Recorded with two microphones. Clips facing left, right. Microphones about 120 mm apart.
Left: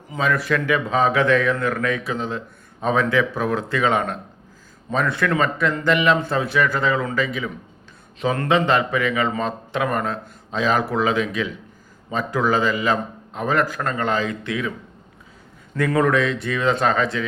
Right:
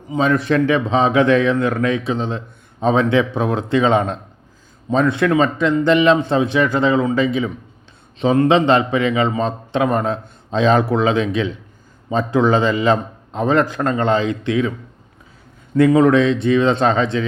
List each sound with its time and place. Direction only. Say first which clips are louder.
0.1 s a man's voice: right 5 dB; 25° right (ahead or behind)
15.7 s a man's voice: right 7 dB; 20° right (ahead or behind)